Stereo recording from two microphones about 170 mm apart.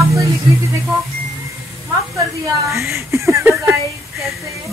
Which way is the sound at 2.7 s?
15° right (ahead or behind).